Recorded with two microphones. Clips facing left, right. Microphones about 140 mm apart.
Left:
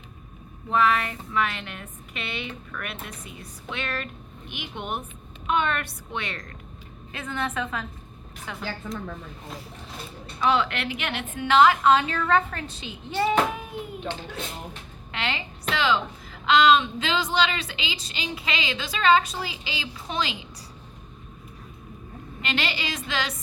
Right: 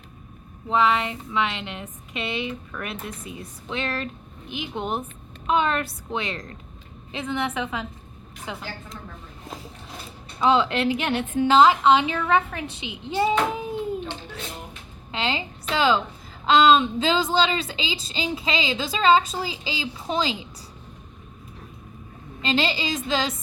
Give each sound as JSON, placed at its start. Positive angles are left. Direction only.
{"t": 0.7, "sound": "a woman's voice", "side_deg": -20}
{"t": 7.1, "sound": "a woman's voice", "side_deg": -15}
{"t": 10.4, "sound": "a woman's voice", "side_deg": -25}
{"t": 12.6, "sound": "a child's voice", "side_deg": -75}
{"t": 13.1, "sound": "a child's voice", "side_deg": -25}
{"t": 15.1, "sound": "a sound", "side_deg": -25}
{"t": 15.7, "sound": "a woman's voice", "side_deg": -30}
{"t": 22.4, "sound": "a woman's voice", "side_deg": -25}